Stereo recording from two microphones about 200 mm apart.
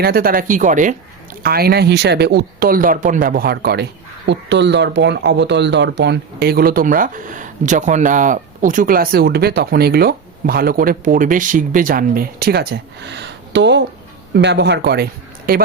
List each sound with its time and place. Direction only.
0.0 s speech: 50° right (ahead or behind)
1.4 s speech: 50° right (ahead or behind)